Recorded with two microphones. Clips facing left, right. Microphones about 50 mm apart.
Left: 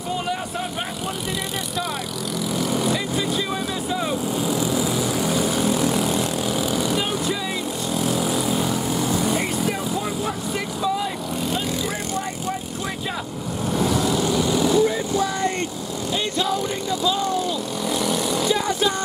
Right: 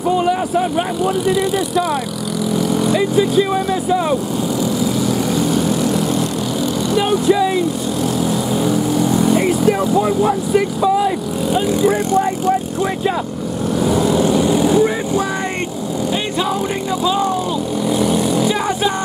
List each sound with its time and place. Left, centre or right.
0.2 s vehicle: centre
1.2 s speech: centre
2.9 s speech: centre
7.0 s speech: centre
9.9 s speech: centre
10.8 s vehicle: centre
13.8 s speech: centre
17.0 s speech: right